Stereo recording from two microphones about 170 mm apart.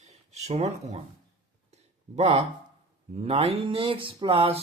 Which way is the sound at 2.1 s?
40° right (ahead or behind).